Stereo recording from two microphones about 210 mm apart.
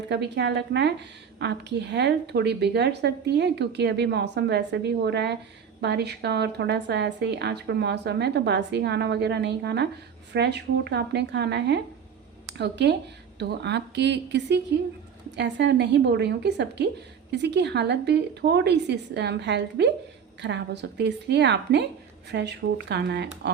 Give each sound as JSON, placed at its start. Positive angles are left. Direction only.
{"t": 0.1, "sound": "a woman's voice", "side_deg": -55}